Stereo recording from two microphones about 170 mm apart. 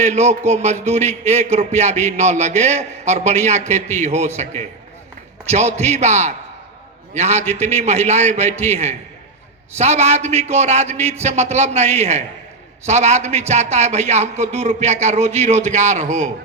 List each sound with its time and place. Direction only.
0.0 s a man's voice: 40° right (ahead or behind)
5.5 s a man's voice: 40° right (ahead or behind)